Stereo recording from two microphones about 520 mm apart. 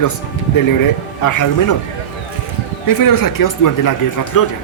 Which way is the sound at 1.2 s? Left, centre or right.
Left.